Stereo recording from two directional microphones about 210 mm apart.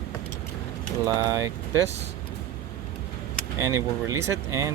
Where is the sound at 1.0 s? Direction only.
15° right (ahead or behind).